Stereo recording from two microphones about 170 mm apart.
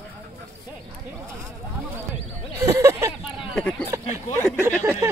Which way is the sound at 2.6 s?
15° right (ahead or behind).